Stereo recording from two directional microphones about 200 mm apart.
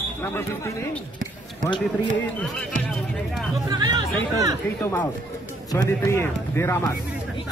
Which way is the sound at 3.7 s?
20° right (ahead or behind).